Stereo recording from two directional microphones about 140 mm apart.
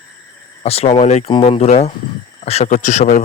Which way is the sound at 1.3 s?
40° left (ahead or behind).